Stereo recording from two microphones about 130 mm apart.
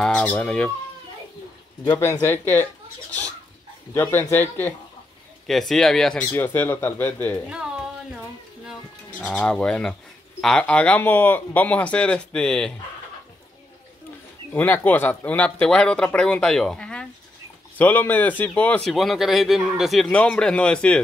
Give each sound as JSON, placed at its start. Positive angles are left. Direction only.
{"t": 0.0, "sound": "speech", "side_deg": 10}
{"t": 2.1, "sound": "speech", "side_deg": 15}
{"t": 3.9, "sound": "speech", "side_deg": 15}
{"t": 5.5, "sound": "a man's voice", "side_deg": 0}
{"t": 6.3, "sound": "speech", "side_deg": 15}
{"t": 9.2, "sound": "speech", "side_deg": 10}
{"t": 14.5, "sound": "a man's voice", "side_deg": 15}